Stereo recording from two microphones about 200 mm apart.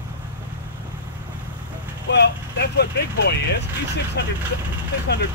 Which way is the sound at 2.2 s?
55° left (ahead or behind).